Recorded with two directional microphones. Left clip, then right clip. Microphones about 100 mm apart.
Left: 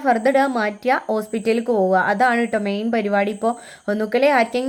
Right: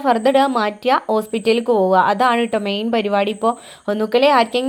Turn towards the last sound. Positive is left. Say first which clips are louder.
# right 3 dB
turn(degrees=-15)  # may be behind; listen again after turning